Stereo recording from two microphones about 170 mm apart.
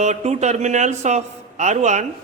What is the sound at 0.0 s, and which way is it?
A man's voice, 40° right (ahead or behind).